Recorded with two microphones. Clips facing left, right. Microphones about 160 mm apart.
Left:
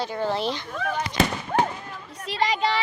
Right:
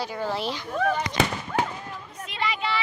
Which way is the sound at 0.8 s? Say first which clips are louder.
Right 6 dB; 55° right (ahead or behind).